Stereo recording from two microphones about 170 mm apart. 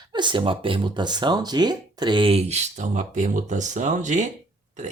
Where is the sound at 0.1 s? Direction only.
25° right (ahead or behind).